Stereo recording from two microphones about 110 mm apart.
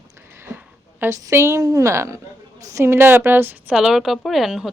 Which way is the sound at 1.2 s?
25° right (ahead or behind).